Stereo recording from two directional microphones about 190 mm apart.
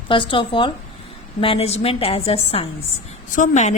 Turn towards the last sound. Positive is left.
turn(degrees=40)  # may be behind; listen again after turning